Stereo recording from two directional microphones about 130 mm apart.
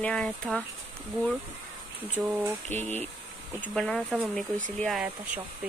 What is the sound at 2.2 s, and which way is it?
Speech, centre (ahead or behind).